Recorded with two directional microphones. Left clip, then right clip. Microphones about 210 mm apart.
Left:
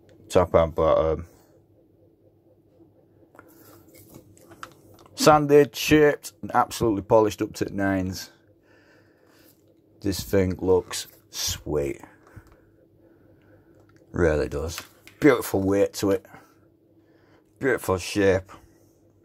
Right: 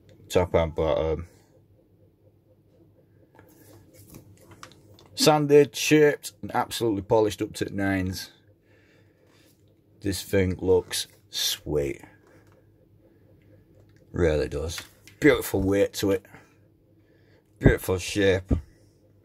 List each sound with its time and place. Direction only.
0.3 s speech: centre (ahead or behind)
5.1 s a sound: 5° left (ahead or behind)
5.4 s speech: centre (ahead or behind)
9.9 s speech: 5° left (ahead or behind)
14.1 s speech: centre (ahead or behind)
17.6 s speech: centre (ahead or behind)